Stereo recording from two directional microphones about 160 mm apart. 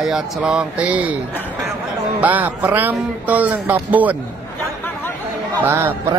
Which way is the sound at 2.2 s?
10° right (ahead or behind).